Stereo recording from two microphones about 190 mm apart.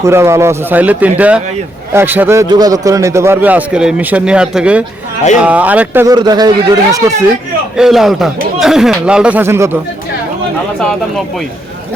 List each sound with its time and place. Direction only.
0.0 s a man's voice: 15° right (ahead or behind)
6.1 s speech: 20° right (ahead or behind)
7.8 s speech: centre (ahead or behind)